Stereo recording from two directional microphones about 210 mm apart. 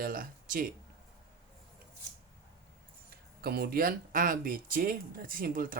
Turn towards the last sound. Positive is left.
turn(degrees=-40)  # may be behind; listen again after turning